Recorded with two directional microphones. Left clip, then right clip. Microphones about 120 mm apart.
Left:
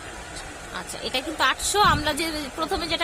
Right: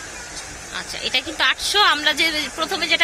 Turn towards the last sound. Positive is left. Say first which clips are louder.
# right 6 dB
turn(degrees=10)  # may be behind; listen again after turning